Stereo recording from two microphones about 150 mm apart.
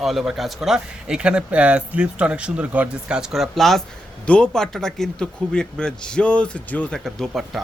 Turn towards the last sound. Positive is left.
turn(degrees=0)  # may be behind; listen again after turning